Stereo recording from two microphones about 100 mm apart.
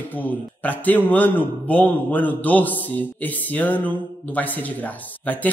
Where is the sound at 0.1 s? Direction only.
15° left (ahead or behind).